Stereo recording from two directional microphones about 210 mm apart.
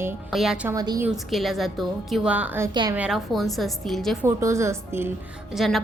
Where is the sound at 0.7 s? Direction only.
20° right (ahead or behind).